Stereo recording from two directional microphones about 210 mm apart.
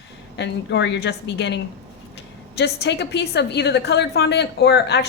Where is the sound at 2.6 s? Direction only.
55° left (ahead or behind).